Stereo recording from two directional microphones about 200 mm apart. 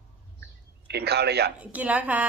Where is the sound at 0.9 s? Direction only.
55° right (ahead or behind).